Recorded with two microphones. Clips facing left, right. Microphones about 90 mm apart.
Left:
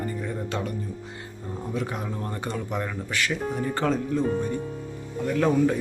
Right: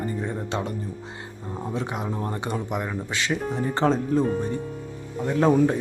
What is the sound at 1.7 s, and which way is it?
Speech, 25° right (ahead or behind).